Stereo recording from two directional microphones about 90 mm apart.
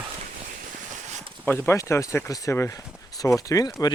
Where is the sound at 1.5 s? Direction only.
25° left (ahead or behind).